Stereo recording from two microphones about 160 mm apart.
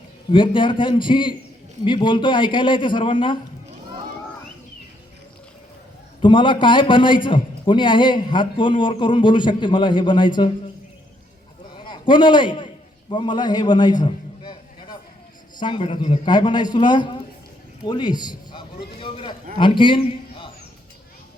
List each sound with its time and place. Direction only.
0.3 s a man's voice: 30° left (ahead or behind)
6.2 s a man's voice: 30° left (ahead or behind)
11.7 s a sound: 30° left (ahead or behind)
15.5 s a man's voice: 30° left (ahead or behind)
17.8 s a sound: 25° left (ahead or behind)
19.5 s a man's voice: 30° left (ahead or behind)